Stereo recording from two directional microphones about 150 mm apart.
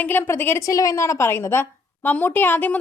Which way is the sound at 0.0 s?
15° left (ahead or behind).